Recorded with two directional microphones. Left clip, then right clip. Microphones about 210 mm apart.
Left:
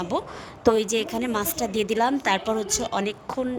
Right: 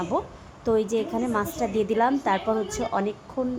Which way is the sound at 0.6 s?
45° left (ahead or behind).